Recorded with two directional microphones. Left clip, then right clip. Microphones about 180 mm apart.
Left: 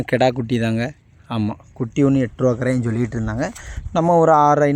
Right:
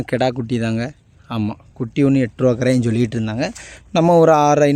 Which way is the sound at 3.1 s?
20° right (ahead or behind).